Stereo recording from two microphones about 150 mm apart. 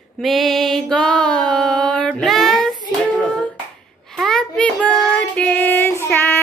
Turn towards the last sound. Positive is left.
turn(degrees=15)  # may be behind; listen again after turning